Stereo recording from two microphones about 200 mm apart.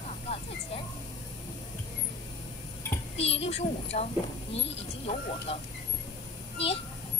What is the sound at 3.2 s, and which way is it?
A woman's voice, 30° left (ahead or behind).